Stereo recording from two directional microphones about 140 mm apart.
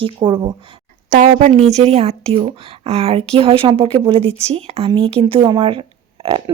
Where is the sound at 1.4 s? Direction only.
50° right (ahead or behind).